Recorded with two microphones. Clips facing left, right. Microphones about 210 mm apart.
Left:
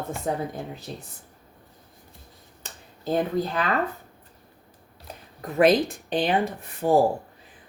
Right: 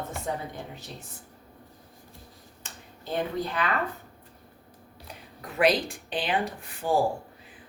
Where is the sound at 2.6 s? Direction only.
40° left (ahead or behind).